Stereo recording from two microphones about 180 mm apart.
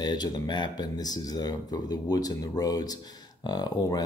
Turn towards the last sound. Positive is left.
turn(degrees=20)  # may be behind; listen again after turning